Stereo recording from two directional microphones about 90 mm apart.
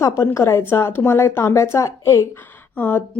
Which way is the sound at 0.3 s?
30° left (ahead or behind).